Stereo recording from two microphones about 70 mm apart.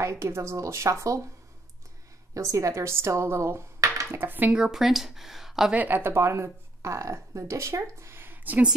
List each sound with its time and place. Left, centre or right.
0.0 s a woman's voice: right
2.3 s speech: right
4.1 s speech: right
4.5 s speech: centre
5.7 s speech: right